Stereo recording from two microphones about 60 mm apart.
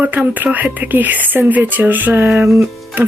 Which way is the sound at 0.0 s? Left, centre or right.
Right.